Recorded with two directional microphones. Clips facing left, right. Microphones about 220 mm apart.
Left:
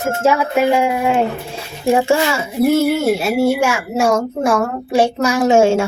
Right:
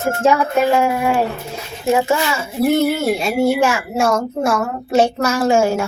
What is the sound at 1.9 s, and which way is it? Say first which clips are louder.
Speech: left 2 dB; 30° left (ahead or behind).